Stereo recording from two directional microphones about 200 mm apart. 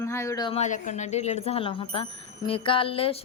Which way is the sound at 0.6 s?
40° left (ahead or behind).